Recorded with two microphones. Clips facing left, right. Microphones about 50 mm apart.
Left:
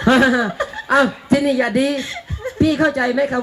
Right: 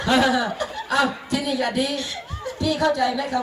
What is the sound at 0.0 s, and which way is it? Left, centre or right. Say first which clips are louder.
Speech: left 5 dB; left.